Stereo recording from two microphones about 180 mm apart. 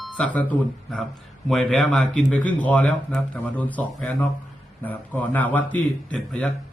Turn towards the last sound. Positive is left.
turn(degrees=5)  # may be behind; listen again after turning